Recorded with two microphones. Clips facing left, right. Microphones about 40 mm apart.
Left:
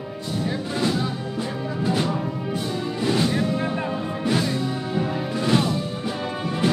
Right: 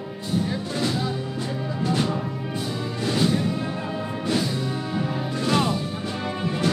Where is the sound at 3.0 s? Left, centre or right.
Centre.